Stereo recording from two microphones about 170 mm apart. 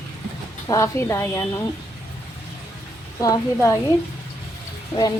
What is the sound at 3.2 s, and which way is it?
Speech, 20° left (ahead or behind).